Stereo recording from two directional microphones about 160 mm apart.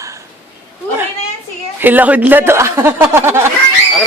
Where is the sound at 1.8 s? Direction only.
10° right (ahead or behind).